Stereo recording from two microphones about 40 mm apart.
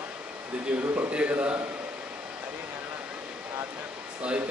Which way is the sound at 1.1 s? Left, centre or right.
Right.